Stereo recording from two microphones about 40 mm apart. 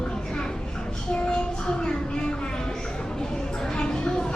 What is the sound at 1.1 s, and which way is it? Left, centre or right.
Child singing, left.